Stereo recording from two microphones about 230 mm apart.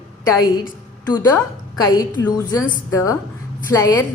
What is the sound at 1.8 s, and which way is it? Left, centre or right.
A woman's voice, centre.